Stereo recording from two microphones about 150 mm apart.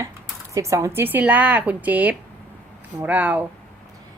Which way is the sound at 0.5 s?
20° right (ahead or behind).